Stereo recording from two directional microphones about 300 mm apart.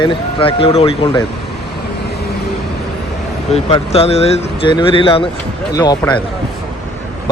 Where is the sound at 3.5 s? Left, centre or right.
Centre.